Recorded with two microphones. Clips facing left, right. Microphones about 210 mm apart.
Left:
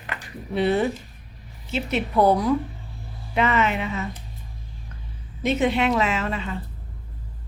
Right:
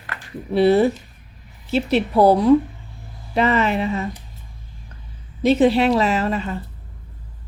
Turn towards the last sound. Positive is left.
turn(degrees=-40)  # may be behind; listen again after turning